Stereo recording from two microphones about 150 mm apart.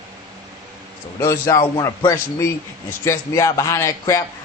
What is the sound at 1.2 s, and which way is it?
A man's voice, 20° left (ahead or behind).